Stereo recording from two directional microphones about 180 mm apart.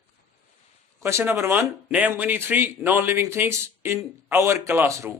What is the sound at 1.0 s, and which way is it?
A man's voice, 10° right (ahead or behind).